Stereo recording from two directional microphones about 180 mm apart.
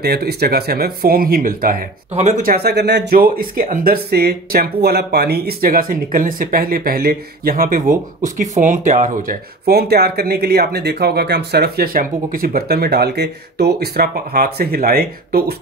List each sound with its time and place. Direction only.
0.0 s speech: 60° right (ahead or behind)